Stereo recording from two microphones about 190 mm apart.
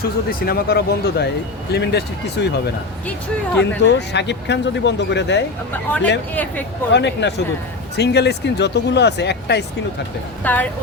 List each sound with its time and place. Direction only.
0.0 s speech: 50° left (ahead or behind)
3.6 s speech: 65° left (ahead or behind)
5.7 s speech: 10° left (ahead or behind)
6.9 s speech: 65° left (ahead or behind)
10.4 s speech: 10° left (ahead or behind)